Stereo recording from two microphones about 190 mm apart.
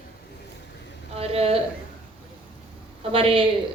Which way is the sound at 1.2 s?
30° right (ahead or behind).